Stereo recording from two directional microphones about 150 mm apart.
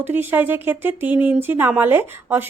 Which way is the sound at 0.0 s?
15° right (ahead or behind).